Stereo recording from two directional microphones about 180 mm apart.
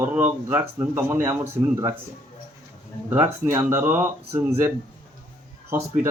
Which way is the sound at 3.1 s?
15° right (ahead or behind).